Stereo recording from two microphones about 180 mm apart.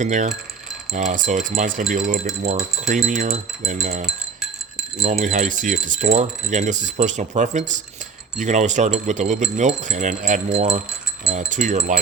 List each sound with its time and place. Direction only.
0.0 s speech: 45° right (ahead or behind)
5.0 s speech: 40° right (ahead or behind)